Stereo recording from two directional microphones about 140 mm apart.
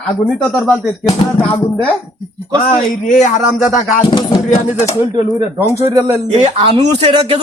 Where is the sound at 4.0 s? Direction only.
35° left (ahead or behind).